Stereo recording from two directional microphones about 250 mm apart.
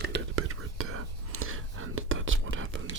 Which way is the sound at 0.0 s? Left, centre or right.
Right.